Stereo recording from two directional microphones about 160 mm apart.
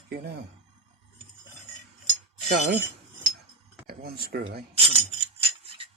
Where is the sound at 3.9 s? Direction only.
75° right (ahead or behind).